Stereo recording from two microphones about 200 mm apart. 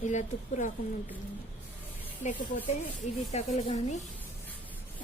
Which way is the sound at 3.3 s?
30° left (ahead or behind).